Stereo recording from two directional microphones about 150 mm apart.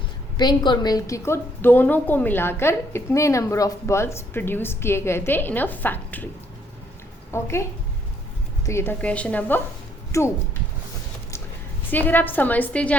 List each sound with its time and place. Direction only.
0.3 s a woman's voice: 30° left (ahead or behind); by 6.2 s 10° left (ahead or behind)
7.3 s a woman's voice: 15° left (ahead or behind)
11.9 s a woman's voice: 10° left (ahead or behind)